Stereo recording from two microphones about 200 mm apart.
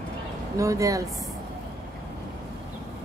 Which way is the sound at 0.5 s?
15° right (ahead or behind).